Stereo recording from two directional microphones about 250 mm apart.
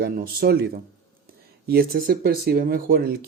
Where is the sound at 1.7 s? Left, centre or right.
Right.